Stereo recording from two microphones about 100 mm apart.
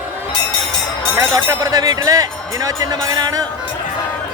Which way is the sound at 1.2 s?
35° right (ahead or behind).